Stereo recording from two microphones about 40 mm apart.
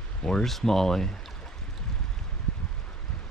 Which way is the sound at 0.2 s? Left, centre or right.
Centre.